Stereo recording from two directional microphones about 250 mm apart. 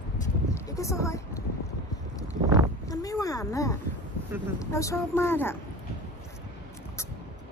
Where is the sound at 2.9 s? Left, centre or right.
Centre.